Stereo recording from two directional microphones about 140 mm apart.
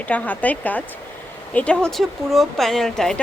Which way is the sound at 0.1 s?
10° left (ahead or behind).